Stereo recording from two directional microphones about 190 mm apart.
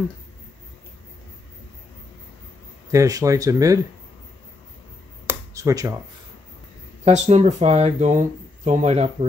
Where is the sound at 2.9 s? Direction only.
15° right (ahead or behind).